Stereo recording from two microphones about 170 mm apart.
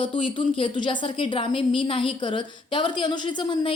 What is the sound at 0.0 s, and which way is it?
Speech, 30° left (ahead or behind).